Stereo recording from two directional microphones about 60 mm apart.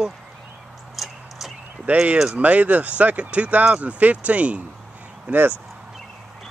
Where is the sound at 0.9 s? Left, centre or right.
Centre.